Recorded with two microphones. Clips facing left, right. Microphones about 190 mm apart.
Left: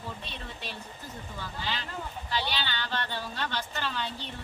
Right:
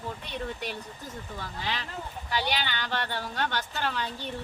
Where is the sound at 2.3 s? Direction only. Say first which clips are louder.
Right 3 dB; 15° right (ahead or behind).